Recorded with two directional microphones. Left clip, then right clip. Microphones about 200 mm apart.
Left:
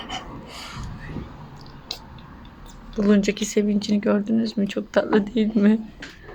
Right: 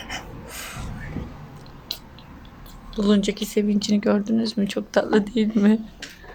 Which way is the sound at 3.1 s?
5° left (ahead or behind).